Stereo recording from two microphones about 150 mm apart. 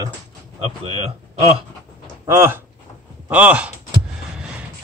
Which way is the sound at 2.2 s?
20° right (ahead or behind).